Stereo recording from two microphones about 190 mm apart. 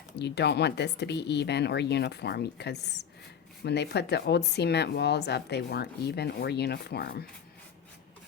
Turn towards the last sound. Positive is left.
turn(degrees=55)  # may be behind; listen again after turning